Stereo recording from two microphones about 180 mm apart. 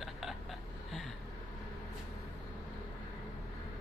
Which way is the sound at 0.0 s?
Centre (ahead or behind).